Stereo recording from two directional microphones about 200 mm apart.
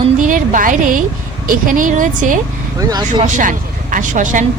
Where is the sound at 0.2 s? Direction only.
40° right (ahead or behind).